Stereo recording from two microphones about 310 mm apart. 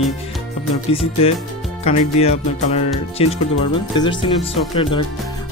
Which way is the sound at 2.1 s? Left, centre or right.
Centre.